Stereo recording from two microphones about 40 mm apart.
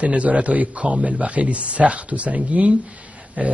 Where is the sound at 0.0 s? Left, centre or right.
Right.